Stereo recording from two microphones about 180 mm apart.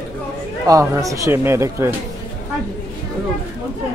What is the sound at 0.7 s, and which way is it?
Speech, 20° right (ahead or behind).